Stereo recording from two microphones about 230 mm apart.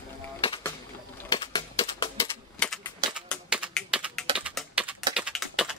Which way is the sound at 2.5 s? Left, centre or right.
Centre.